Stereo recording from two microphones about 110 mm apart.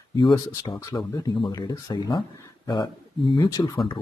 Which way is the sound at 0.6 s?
30° left (ahead or behind).